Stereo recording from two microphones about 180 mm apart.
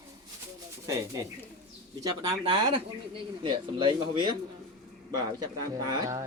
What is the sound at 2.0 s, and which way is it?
Speech, 25° right (ahead or behind).